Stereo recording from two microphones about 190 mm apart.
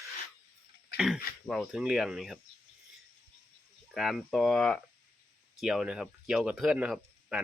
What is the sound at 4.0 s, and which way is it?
Speech, centre (ahead or behind).